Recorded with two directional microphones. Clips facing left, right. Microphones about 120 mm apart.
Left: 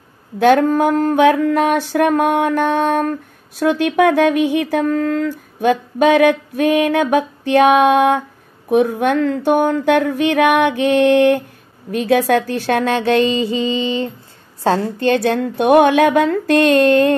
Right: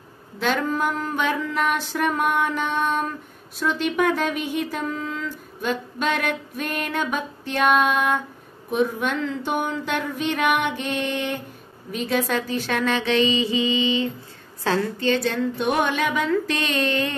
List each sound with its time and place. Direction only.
0.4 s a sound: 60° left (ahead or behind)
12.1 s a woman's voice: 65° left (ahead or behind); by 14.9 s 40° left (ahead or behind)
15.0 s speech: 55° left (ahead or behind)